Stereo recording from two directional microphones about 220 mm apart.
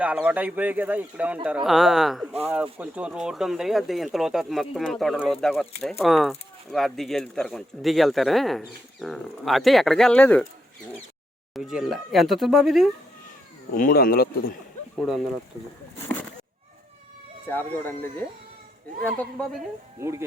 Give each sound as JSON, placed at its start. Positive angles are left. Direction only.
{"t": 0.0, "sound": "speech", "side_deg": -5}
{"t": 11.5, "sound": "speech", "side_deg": 0}
{"t": 13.7, "sound": "speech", "side_deg": 40}
{"t": 14.9, "sound": "speech", "side_deg": 0}
{"t": 16.0, "sound": "a sound", "side_deg": 10}
{"t": 17.4, "sound": "speech", "side_deg": 10}
{"t": 20.0, "sound": "speech", "side_deg": -10}